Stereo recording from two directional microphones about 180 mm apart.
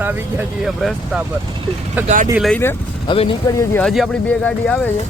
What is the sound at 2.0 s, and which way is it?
Speech, 10° right (ahead or behind).